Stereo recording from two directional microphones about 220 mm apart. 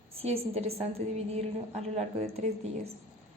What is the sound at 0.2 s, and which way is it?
A woman's voice, 25° right (ahead or behind).